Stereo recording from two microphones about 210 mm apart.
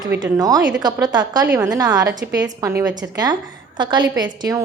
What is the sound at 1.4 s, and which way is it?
A woman's voice, 10° right (ahead or behind).